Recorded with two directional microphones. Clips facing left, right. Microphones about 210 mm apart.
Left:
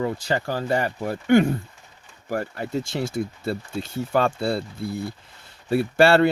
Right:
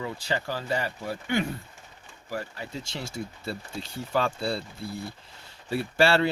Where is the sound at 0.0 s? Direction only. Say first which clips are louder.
Left 6 dB; 50° left (ahead or behind).